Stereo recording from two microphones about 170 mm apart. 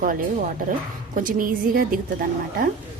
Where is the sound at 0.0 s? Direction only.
55° right (ahead or behind).